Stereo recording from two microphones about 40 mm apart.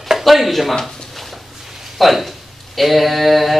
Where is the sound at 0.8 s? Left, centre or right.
Centre.